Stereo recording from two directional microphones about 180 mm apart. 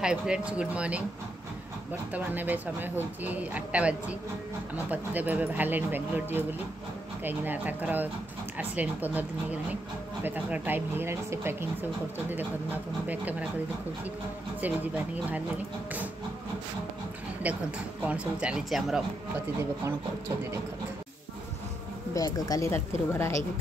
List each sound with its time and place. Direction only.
0.0 s speech: 5° right (ahead or behind)
13.1 s speech: 10° right (ahead or behind)
17.4 s speech: 10° right (ahead or behind)
22.1 s a woman's voice: 20° left (ahead or behind)